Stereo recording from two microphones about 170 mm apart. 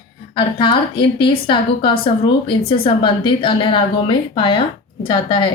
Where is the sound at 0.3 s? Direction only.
30° left (ahead or behind).